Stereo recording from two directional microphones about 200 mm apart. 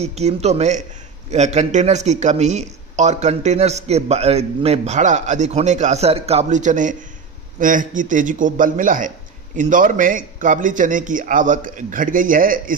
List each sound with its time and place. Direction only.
0.0 s speech: 35° right (ahead or behind)